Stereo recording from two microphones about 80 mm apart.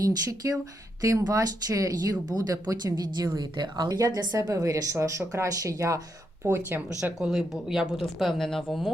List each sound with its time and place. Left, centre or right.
0.0 s a woman's voice: right
6.4 s speech: right
6.8 s speech: centre